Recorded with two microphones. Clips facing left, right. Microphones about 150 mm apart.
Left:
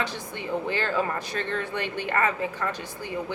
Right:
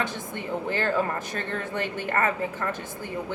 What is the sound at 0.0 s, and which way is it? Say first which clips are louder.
A woman's voice: right 1 dB; 45° right (ahead or behind).